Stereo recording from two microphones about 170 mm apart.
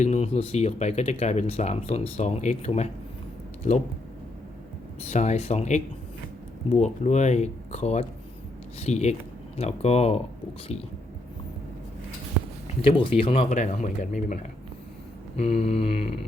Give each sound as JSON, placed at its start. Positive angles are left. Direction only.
{"t": 0.0, "sound": "speech", "side_deg": 40}
{"t": 5.0, "sound": "speech", "side_deg": 45}
{"t": 12.8, "sound": "speech", "side_deg": 35}
{"t": 15.4, "sound": "speech", "side_deg": 35}